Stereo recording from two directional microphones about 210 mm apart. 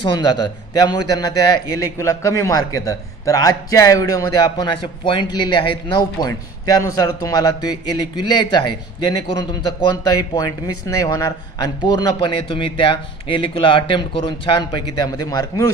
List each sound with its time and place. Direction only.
0.0 s a man's voice: 20° left (ahead or behind)